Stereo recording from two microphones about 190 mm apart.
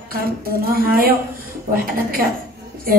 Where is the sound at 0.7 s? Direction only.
50° right (ahead or behind).